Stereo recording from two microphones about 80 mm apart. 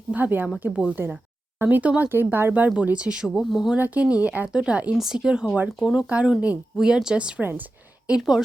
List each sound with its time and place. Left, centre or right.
0.1 s speech: right
0.7 s speech: centre
3.8 s speech: centre